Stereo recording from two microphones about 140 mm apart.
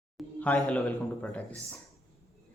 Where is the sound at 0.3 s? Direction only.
10° left (ahead or behind).